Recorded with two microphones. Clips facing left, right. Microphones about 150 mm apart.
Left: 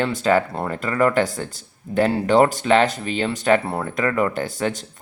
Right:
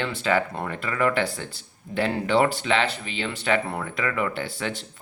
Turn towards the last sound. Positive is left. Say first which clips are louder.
# left 6 dB
turn(degrees=40)  # may be behind; listen again after turning